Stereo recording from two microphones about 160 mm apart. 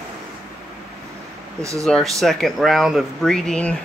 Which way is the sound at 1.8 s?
Centre (ahead or behind).